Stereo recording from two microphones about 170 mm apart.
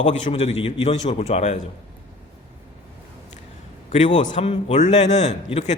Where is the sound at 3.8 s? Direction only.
45° left (ahead or behind).